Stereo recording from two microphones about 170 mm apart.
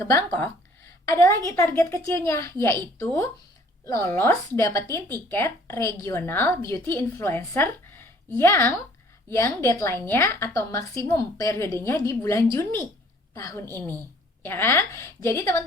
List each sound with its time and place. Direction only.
0.0 s a woman's voice: 15° left (ahead or behind)
3.8 s a woman's voice: 15° left (ahead or behind)